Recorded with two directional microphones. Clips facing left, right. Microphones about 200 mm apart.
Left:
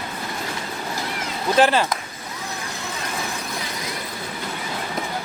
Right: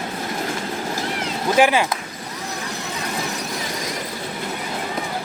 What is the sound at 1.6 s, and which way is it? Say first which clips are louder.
Speech: right 1 dB; 10° right (ahead or behind).